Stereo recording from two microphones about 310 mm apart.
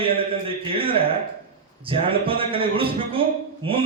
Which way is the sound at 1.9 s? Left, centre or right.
Centre.